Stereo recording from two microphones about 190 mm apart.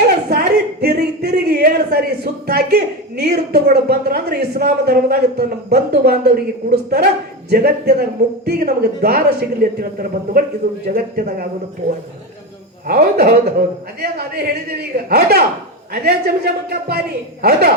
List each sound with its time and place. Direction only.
0.3 s a man's voice: 55° right (ahead or behind)
12.9 s a woman's voice: 55° right (ahead or behind)